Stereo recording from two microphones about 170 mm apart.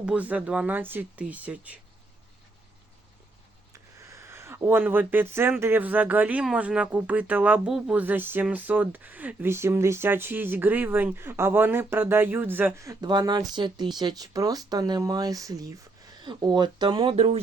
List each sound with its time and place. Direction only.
0.0 s speech: 5° right (ahead or behind)
3.7 s speech: 20° right (ahead or behind); by 17.4 s 35° right (ahead or behind)